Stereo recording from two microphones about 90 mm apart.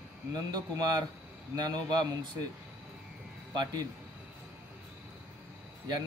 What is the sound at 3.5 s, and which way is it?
Mantra, 50° right (ahead or behind).